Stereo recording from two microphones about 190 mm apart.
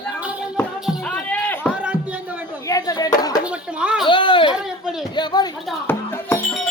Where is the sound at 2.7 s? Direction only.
20° left (ahead or behind).